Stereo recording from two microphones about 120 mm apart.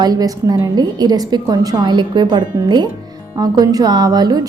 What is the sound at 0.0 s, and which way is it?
A woman's voice, 30° right (ahead or behind).